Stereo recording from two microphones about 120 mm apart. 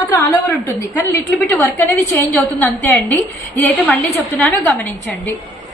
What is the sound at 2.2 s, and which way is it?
A woman's voice, 15° left (ahead or behind).